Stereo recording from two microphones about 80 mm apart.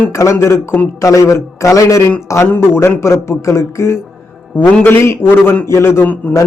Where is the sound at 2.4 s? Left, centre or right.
Left.